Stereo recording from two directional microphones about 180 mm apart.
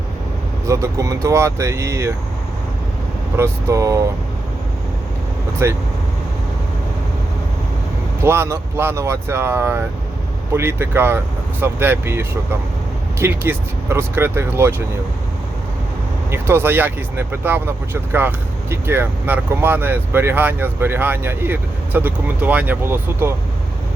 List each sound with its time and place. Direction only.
0.7 s speech: 15° right (ahead or behind)
3.3 s speech: 15° right (ahead or behind)
5.6 s speech: 15° right (ahead or behind)
8.2 s speech: 15° right (ahead or behind)
16.3 s speech: 15° right (ahead or behind)